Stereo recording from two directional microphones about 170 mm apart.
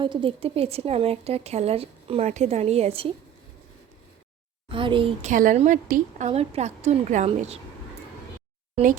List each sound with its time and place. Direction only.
0.0 s a woman's voice: 30° right (ahead or behind)
4.7 s a child's voice: 30° right (ahead or behind)
5.3 s a woman's voice: 50° right (ahead or behind)